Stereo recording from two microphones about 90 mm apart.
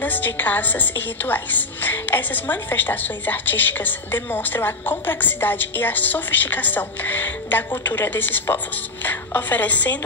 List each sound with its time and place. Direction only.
0.0 s a woman's voice: 20° left (ahead or behind)